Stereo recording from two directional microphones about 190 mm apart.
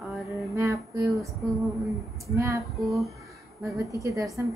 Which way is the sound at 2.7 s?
Centre (ahead or behind).